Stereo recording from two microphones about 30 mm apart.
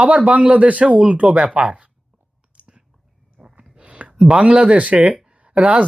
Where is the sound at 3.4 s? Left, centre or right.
Centre.